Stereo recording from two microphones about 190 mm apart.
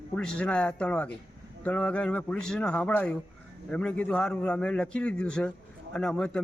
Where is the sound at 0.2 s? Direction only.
5° left (ahead or behind).